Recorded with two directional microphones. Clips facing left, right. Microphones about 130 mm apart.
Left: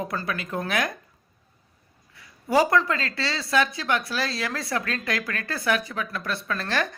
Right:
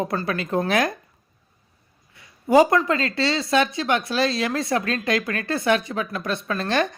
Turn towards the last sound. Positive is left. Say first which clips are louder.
# right 4 dB
turn(degrees=-20)  # may be behind; listen again after turning